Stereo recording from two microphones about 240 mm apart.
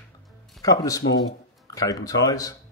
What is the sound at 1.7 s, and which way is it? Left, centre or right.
Speech, centre.